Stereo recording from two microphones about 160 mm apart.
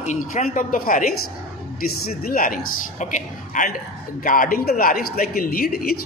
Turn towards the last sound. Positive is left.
turn(degrees=65)  # may be behind; listen again after turning